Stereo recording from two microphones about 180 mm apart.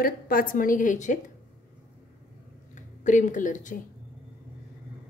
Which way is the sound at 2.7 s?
45° left (ahead or behind).